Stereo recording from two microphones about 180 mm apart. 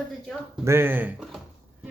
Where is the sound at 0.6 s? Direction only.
15° right (ahead or behind).